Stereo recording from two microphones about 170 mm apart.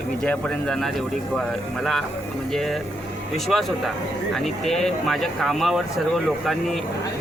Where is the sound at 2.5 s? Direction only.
Centre (ahead or behind).